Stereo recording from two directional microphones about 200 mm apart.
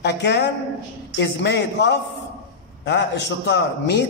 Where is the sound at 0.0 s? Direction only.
55° left (ahead or behind).